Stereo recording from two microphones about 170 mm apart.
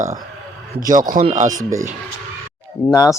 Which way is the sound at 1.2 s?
45° right (ahead or behind).